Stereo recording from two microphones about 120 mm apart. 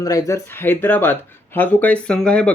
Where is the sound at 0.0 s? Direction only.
30° left (ahead or behind).